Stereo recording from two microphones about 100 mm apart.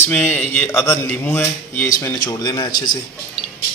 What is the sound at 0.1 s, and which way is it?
Speech, 20° left (ahead or behind).